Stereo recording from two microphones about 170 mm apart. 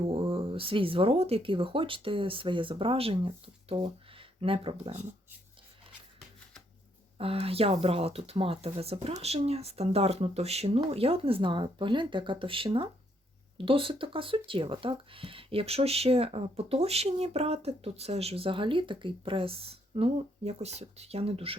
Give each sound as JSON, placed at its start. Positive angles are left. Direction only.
{"t": 0.0, "sound": "speech", "side_deg": -35}
{"t": 7.2, "sound": "speech", "side_deg": -35}